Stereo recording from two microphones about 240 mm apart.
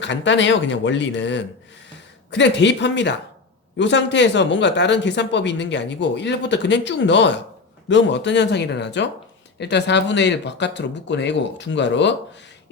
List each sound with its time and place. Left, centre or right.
0.0 s speech: left